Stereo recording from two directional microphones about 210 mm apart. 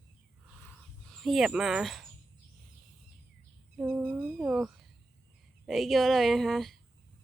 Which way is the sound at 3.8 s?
5° right (ahead or behind).